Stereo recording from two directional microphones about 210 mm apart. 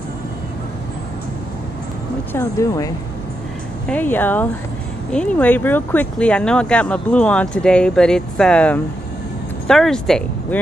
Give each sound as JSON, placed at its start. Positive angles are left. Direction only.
{"t": 2.3, "sound": "speech", "side_deg": 15}